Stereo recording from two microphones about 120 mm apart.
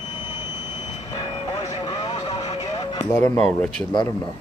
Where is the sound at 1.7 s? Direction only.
30° left (ahead or behind).